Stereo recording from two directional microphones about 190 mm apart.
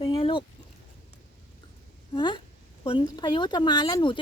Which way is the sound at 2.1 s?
25° left (ahead or behind).